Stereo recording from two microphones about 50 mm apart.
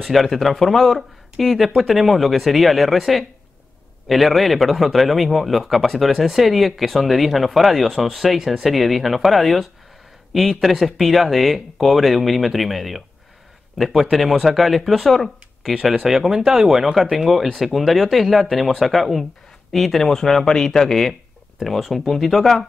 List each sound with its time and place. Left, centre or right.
0.0 s a man's voice: centre